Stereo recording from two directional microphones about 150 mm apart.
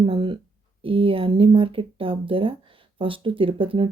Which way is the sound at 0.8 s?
35° right (ahead or behind).